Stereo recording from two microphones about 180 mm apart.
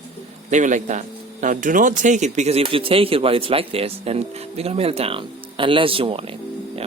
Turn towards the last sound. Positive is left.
turn(degrees=-30)  # may be behind; listen again after turning